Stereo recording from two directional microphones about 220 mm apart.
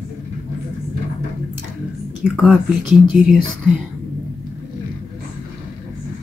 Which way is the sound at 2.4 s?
Centre (ahead or behind).